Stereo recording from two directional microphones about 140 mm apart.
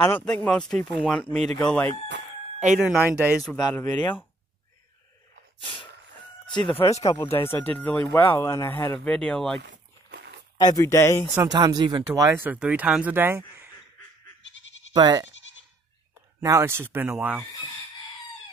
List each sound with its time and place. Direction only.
0.0 s speech: 10° left (ahead or behind)
2.6 s speech: 5° right (ahead or behind)
3.7 s speech: 15° left (ahead or behind)
5.6 s a sound: 35° left (ahead or behind)
6.8 s speech: 25° left (ahead or behind); by 9.6 s 5° left (ahead or behind)
10.6 s speech: 25° left (ahead or behind)
11.4 s speech: 30° right (ahead or behind)
12.1 s speech: 15° right (ahead or behind)
15.0 s speech: 30° right (ahead or behind)
16.3 s speech: 20° right (ahead or behind)